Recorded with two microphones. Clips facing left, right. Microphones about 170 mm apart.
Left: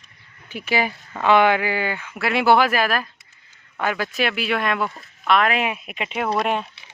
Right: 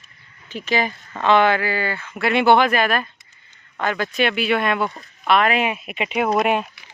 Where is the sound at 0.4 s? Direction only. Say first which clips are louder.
Right 1 dB; 10° left (ahead or behind).